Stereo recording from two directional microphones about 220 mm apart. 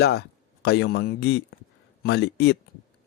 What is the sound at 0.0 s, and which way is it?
Speech, 45° left (ahead or behind).